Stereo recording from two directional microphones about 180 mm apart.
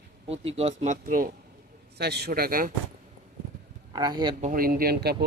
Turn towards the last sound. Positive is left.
turn(degrees=-60)  # may be behind; listen again after turning